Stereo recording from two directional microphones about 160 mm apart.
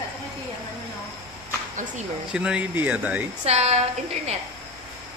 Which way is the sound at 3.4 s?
40° right (ahead or behind).